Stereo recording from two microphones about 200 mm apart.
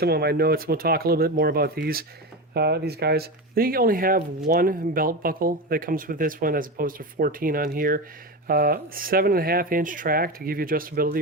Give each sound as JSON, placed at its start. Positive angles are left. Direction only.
{"t": 0.0, "sound": "speech", "side_deg": -50}